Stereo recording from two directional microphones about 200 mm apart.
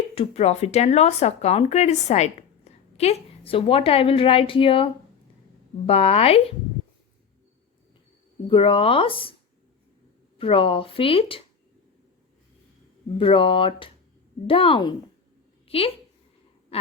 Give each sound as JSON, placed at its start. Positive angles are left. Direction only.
{"t": 0.1, "sound": "speech", "side_deg": 30}
{"t": 8.4, "sound": "speech", "side_deg": 25}
{"t": 10.3, "sound": "speech", "side_deg": 25}
{"t": 13.1, "sound": "a woman's voice", "side_deg": 25}